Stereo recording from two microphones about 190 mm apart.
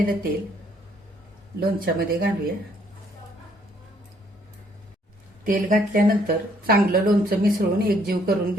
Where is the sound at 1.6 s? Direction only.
50° right (ahead or behind).